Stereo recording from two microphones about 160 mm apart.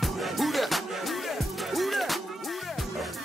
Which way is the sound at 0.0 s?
Centre (ahead or behind).